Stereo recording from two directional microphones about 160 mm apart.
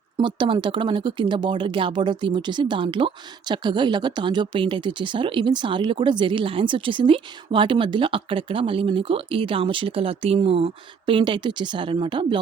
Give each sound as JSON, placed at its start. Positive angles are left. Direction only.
{"t": 0.2, "sound": "speech", "side_deg": -30}